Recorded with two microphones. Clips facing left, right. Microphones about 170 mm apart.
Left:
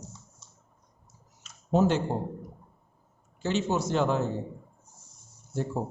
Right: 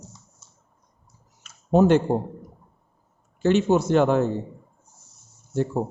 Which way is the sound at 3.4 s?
55° right (ahead or behind).